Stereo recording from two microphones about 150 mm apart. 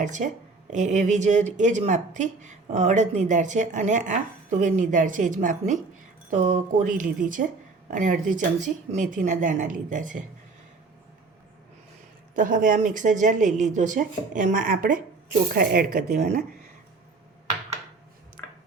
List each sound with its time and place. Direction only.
0.0 s a woman's voice: 55° right (ahead or behind)
12.3 s speech: 60° right (ahead or behind)